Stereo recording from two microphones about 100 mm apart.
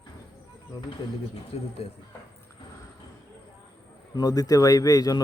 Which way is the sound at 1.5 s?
75° left (ahead or behind).